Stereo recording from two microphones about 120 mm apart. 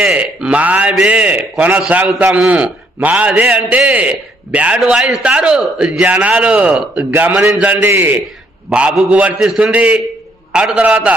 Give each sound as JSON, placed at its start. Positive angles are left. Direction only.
{"t": 0.0, "sound": "a man's voice", "side_deg": -5}
{"t": 8.7, "sound": "a man's voice", "side_deg": -5}